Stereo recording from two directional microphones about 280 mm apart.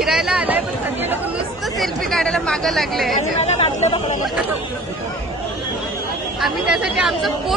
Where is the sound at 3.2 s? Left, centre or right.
Left.